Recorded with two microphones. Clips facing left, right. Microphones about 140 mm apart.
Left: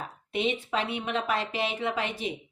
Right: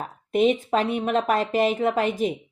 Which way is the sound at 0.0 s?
45° right (ahead or behind).